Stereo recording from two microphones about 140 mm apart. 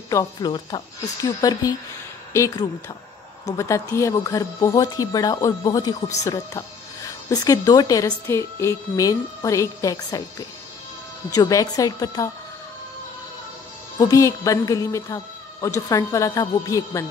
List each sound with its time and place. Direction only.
0.1 s speech: 25° left (ahead or behind)
11.3 s speech: 25° left (ahead or behind)
13.9 s speech: 25° left (ahead or behind)